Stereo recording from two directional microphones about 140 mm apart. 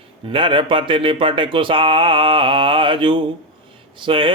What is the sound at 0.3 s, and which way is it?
Speech, 35° right (ahead or behind).